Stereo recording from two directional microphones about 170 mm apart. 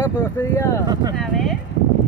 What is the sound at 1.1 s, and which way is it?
Speech, centre (ahead or behind).